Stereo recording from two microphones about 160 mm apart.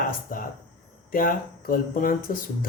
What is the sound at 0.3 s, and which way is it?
Speech, 60° left (ahead or behind).